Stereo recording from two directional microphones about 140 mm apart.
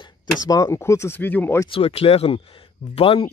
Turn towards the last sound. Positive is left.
turn(degrees=40)  # may be behind; listen again after turning